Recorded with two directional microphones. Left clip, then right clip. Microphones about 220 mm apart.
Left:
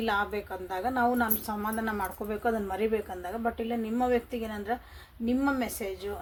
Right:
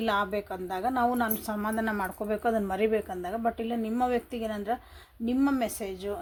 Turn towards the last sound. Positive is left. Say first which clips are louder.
# right 2 dB
turn(degrees=-45)  # may be behind; listen again after turning